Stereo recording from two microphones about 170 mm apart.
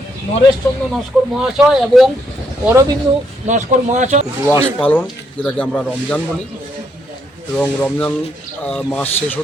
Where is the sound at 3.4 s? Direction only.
45° right (ahead or behind).